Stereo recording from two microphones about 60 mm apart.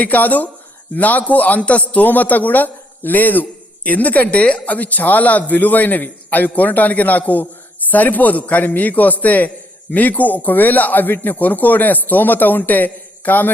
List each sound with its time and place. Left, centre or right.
0.0 s speech: left